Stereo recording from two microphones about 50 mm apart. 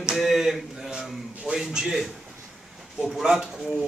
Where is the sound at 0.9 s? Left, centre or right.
Centre.